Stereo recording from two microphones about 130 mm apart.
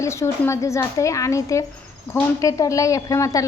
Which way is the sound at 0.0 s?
20° left (ahead or behind).